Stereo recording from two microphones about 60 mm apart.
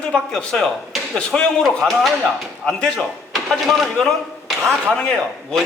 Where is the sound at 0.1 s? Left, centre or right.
Centre.